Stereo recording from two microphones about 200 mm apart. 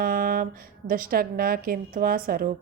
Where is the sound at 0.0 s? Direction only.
45° right (ahead or behind).